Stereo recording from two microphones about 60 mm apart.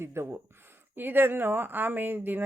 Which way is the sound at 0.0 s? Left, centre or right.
Right.